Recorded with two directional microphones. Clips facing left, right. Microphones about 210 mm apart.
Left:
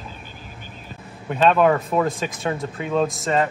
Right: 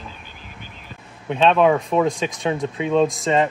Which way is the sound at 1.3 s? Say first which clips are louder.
Right 1 dB; 5° left (ahead or behind).